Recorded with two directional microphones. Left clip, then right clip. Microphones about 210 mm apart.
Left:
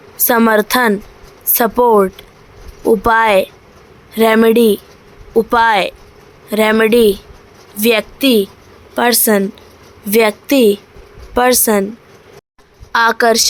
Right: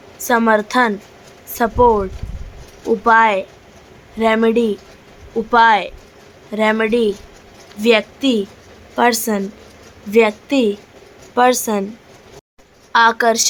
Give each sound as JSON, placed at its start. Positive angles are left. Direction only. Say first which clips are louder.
{"t": 0.2, "sound": "a woman's voice", "louder": "left 3 dB", "side_deg": 25}
{"t": 10.1, "sound": "a woman's voice", "louder": "left 2 dB", "side_deg": 25}
{"t": 12.9, "sound": "a woman's voice", "louder": "left 1 dB", "side_deg": 15}